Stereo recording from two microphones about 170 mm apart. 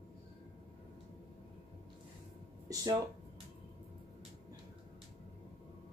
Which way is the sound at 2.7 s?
20° right (ahead or behind).